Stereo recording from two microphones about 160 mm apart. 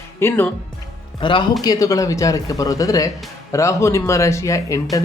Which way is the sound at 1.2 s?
30° left (ahead or behind).